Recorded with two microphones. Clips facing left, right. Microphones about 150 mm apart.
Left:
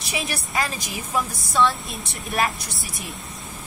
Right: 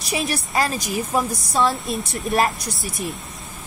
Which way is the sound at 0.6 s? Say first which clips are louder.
Right 4 dB; 40° right (ahead or behind).